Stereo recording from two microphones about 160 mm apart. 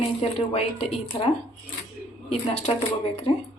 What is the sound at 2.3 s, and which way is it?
Speech, 40° left (ahead or behind).